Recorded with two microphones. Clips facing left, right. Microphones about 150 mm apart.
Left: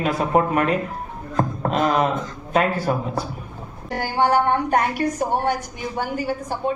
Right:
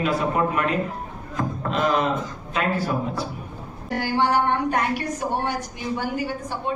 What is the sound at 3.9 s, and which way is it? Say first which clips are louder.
A woman's voice: left 2 dB; 45° left (ahead or behind).